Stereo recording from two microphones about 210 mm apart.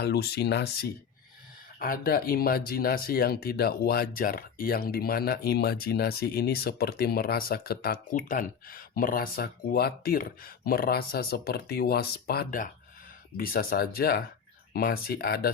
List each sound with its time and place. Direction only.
0.0 s speech: 50° left (ahead or behind)